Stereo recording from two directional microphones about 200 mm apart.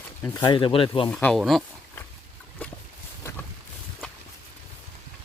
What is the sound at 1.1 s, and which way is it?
Speech, 5° left (ahead or behind).